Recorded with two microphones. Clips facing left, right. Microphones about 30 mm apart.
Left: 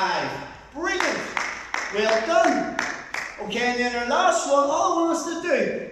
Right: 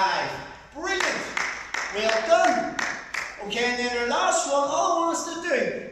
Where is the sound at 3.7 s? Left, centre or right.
Centre.